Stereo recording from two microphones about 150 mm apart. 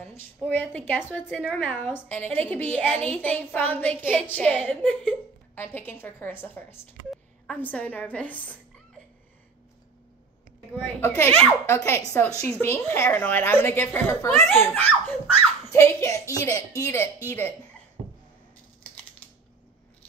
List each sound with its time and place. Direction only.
0.4 s a woman's voice: 5° left (ahead or behind)
11.0 s a woman's voice: 15° left (ahead or behind)